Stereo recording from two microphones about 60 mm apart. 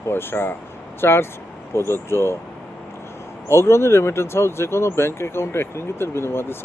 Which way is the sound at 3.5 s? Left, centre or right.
Left.